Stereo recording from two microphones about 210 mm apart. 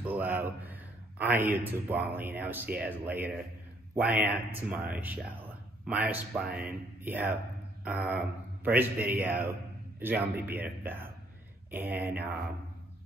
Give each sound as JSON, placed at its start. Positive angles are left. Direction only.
{"t": 0.0, "sound": "a man's voice", "side_deg": -10}
{"t": 6.4, "sound": "speech", "side_deg": -45}
{"t": 7.1, "sound": "a man's voice", "side_deg": -10}